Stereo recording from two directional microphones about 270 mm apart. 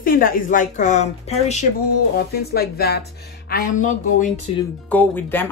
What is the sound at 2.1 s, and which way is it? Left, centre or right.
Speech, left.